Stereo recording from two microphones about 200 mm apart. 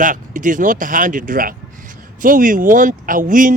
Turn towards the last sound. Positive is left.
turn(degrees=-40)  # may be behind; listen again after turning